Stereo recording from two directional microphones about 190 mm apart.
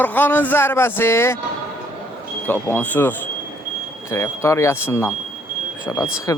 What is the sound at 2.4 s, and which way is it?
Speech, 10° left (ahead or behind).